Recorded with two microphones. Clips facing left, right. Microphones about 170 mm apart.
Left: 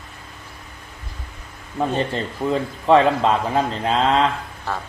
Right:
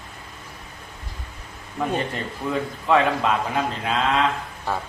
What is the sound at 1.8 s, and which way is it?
A man's voice, 30° left (ahead or behind).